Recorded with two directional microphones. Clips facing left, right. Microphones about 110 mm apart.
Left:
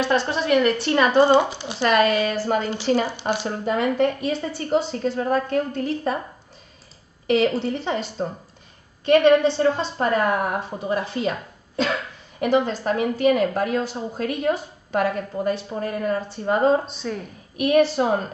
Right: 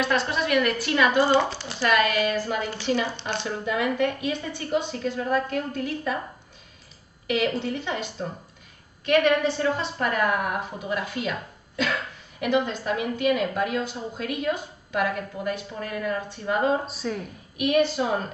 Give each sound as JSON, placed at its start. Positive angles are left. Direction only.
{"t": 0.0, "sound": "a woman's voice", "side_deg": 30}
{"t": 1.3, "sound": "speech", "side_deg": 15}
{"t": 1.8, "sound": "a woman's voice", "side_deg": 35}
{"t": 3.1, "sound": "speech", "side_deg": 10}
{"t": 3.4, "sound": "a woman's voice", "side_deg": 35}
{"t": 7.2, "sound": "a woman's voice", "side_deg": 35}
{"t": 16.8, "sound": "a woman's voice", "side_deg": 0}
{"t": 17.6, "sound": "a woman's voice", "side_deg": 35}